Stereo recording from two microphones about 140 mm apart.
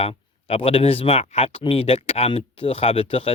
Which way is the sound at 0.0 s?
45° left (ahead or behind).